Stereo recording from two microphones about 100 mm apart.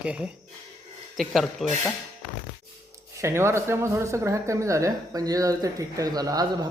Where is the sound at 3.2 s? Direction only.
25° right (ahead or behind).